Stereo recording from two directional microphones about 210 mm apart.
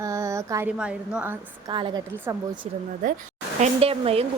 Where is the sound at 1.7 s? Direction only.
20° right (ahead or behind).